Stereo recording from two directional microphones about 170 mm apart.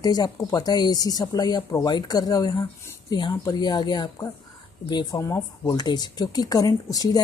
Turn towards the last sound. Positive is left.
turn(degrees=20)  # may be behind; listen again after turning